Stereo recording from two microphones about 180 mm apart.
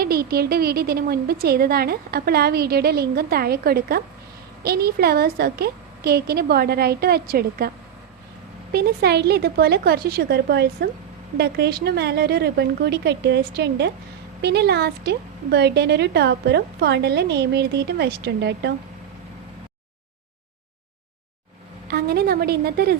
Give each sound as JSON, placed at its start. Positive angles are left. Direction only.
{"t": 0.0, "sound": "a woman's voice", "side_deg": -55}
{"t": 8.7, "sound": "a woman's voice", "side_deg": -60}
{"t": 21.8, "sound": "a woman's voice", "side_deg": -60}